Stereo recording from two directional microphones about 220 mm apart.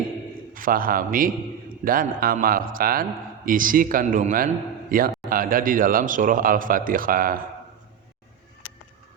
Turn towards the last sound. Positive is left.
turn(degrees=-40)  # may be behind; listen again after turning